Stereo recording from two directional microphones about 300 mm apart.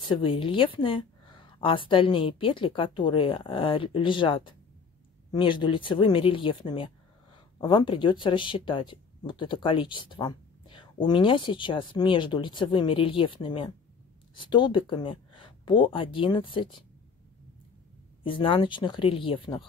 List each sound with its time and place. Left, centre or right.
0.1 s speech: centre
18.2 s speech: centre